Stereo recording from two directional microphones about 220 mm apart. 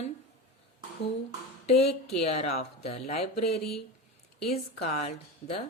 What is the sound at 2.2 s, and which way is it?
Speech, 30° left (ahead or behind).